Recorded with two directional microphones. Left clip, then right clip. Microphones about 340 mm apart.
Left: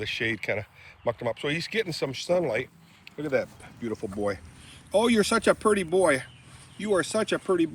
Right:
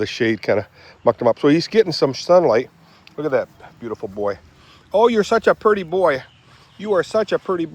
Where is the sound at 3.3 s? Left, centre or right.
Centre.